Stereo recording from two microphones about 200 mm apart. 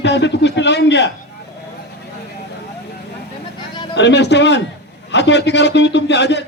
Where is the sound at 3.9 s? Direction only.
60° left (ahead or behind).